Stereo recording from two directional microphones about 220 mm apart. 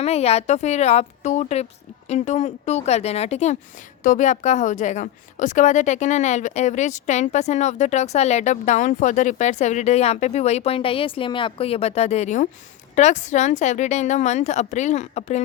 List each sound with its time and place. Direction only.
0.0 s a woman's voice: 30° left (ahead or behind)